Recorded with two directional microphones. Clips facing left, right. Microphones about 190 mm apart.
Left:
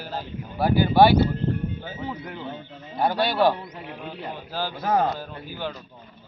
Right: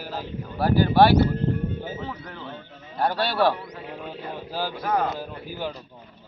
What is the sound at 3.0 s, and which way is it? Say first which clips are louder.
Speech: left 1 dB; centre (ahead or behind).